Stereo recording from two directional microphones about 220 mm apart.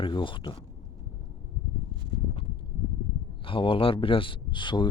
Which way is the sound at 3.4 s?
25° left (ahead or behind).